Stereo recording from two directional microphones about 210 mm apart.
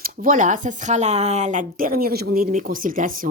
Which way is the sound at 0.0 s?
40° right (ahead or behind).